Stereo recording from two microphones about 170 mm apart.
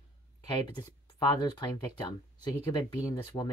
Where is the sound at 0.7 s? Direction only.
25° left (ahead or behind).